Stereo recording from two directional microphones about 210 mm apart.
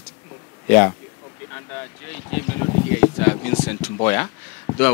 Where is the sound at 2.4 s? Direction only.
15° left (ahead or behind).